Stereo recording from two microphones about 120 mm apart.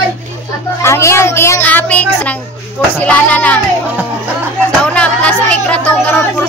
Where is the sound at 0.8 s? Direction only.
20° left (ahead or behind).